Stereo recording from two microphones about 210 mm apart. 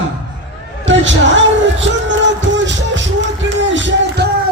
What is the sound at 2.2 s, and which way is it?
Music, 60° right (ahead or behind).